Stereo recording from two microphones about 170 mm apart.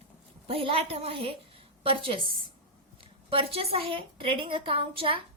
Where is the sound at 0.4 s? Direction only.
35° right (ahead or behind).